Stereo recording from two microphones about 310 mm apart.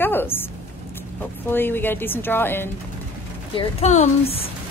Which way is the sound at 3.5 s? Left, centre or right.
Centre.